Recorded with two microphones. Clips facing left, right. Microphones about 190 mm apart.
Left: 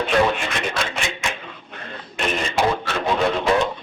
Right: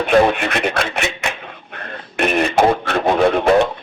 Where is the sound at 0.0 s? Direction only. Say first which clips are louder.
Right 5 dB; 60° right (ahead or behind).